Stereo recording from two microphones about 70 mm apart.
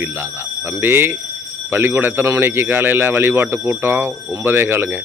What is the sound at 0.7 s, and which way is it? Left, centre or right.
Speech, right.